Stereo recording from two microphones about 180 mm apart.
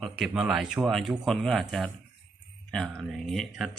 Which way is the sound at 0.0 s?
Centre (ahead or behind).